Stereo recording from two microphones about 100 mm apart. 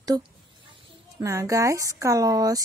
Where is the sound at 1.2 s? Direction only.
30° right (ahead or behind).